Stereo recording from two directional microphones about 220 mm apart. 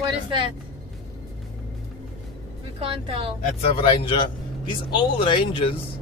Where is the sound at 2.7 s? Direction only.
25° right (ahead or behind).